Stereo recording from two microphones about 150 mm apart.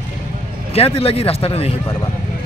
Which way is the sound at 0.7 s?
40° left (ahead or behind).